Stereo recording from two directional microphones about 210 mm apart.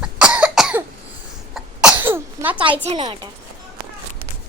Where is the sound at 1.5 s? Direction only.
5° right (ahead or behind).